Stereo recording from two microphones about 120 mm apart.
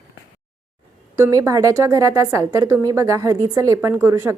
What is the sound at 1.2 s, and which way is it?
A woman's voice, 30° right (ahead or behind).